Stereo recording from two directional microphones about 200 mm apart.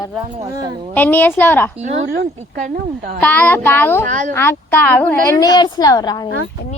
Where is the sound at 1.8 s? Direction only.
35° right (ahead or behind).